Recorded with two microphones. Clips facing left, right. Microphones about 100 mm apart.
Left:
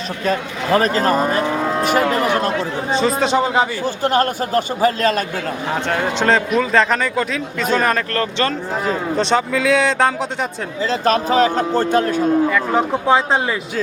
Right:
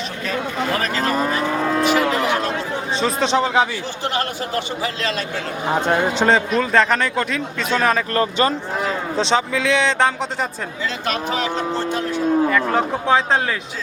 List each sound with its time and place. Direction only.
0.3 s speech: 40° left (ahead or behind)
1.5 s vehicle: 15° left (ahead or behind)
1.8 s cattle: 45° left (ahead or behind)
2.9 s speech: centre (ahead or behind)
4.0 s speech: 45° left (ahead or behind)
5.6 s speech: 20° right (ahead or behind)
6.1 s speech: centre (ahead or behind)
8.1 s speech: 15° right (ahead or behind)
9.1 s speech: centre (ahead or behind)
10.8 s speech: 40° left (ahead or behind)
12.5 s speech: 5° left (ahead or behind)